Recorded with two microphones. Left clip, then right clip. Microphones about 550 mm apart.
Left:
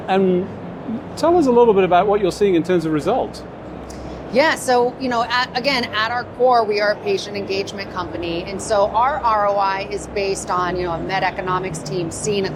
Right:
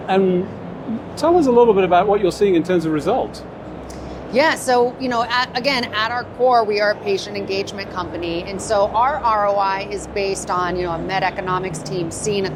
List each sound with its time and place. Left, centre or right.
0.1 s speech: left
4.4 s a woman's voice: right